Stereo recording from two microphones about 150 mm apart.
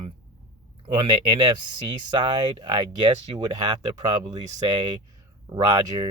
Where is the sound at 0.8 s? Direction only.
30° right (ahead or behind).